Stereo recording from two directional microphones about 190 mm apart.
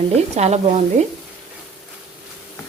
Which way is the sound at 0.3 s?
35° right (ahead or behind).